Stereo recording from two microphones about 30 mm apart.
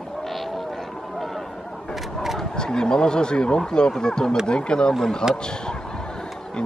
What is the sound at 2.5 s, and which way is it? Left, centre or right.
Speech, left.